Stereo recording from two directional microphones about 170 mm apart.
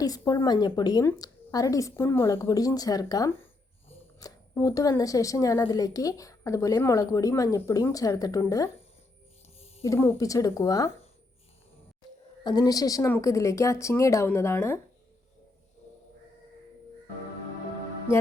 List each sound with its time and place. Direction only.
0.0 s a woman's voice: 20° left (ahead or behind)
9.8 s a woman's voice: 15° left (ahead or behind)
12.4 s a woman's voice: 25° left (ahead or behind)